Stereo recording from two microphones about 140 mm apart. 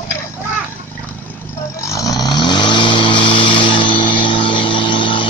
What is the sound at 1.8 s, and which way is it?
Vehicle, 25° left (ahead or behind).